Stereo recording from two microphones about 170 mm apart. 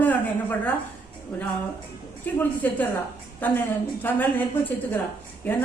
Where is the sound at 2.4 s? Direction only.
10° left (ahead or behind).